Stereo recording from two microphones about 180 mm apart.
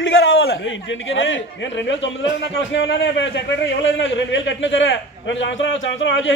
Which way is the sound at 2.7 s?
75° left (ahead or behind).